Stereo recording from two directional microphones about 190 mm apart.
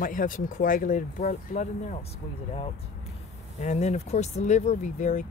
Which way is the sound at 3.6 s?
35° left (ahead or behind).